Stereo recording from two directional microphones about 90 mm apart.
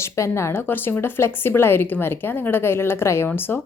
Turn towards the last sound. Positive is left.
turn(degrees=25)  # may be behind; listen again after turning